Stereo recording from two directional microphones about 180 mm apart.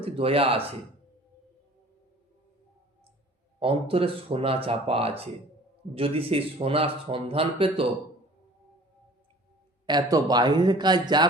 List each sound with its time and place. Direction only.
0.0 s a man's voice: 30° right (ahead or behind)
3.6 s a man's voice: 30° right (ahead or behind)
9.8 s a man's voice: 20° right (ahead or behind)